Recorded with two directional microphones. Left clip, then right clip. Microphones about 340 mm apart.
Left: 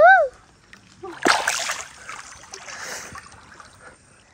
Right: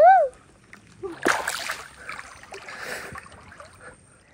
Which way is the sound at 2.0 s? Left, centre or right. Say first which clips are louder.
Even; centre.